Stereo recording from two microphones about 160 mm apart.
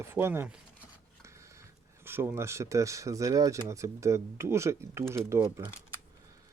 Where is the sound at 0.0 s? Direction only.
15° right (ahead or behind).